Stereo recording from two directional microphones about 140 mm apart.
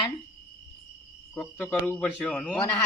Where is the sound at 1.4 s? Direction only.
5° left (ahead or behind).